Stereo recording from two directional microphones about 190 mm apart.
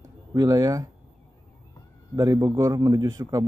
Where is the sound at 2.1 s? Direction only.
20° right (ahead or behind).